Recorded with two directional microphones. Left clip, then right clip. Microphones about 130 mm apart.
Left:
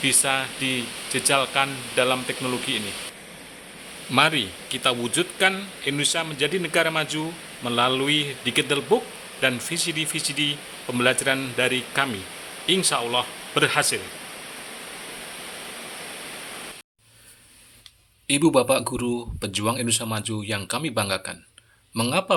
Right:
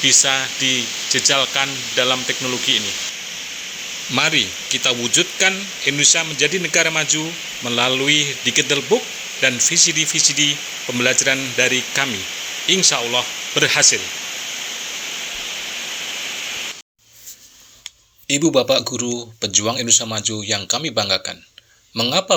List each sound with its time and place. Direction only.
0.0 s speech: centre (ahead or behind)
4.1 s speech: 5° right (ahead or behind)
18.3 s speech: 25° left (ahead or behind)